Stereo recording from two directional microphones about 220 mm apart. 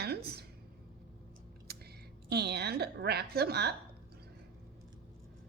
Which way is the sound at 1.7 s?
45° right (ahead or behind).